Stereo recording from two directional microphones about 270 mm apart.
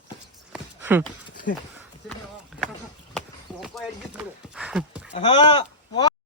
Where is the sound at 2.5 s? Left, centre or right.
Centre.